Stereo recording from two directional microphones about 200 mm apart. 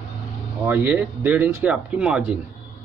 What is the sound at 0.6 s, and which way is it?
Speech, 10° right (ahead or behind).